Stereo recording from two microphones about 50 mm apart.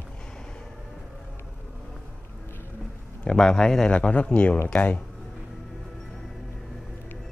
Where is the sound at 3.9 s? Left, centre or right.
Left.